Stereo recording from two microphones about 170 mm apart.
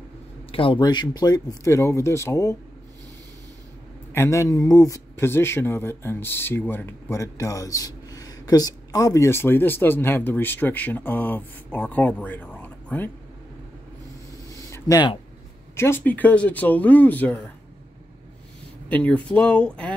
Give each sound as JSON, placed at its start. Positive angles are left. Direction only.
{"t": 0.5, "sound": "speech", "side_deg": 30}
{"t": 4.1, "sound": "speech", "side_deg": 15}
{"t": 14.7, "sound": "speech", "side_deg": 20}
{"t": 18.9, "sound": "speech", "side_deg": 10}